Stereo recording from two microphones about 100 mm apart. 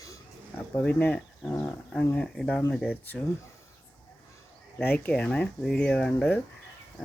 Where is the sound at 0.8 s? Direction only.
15° left (ahead or behind).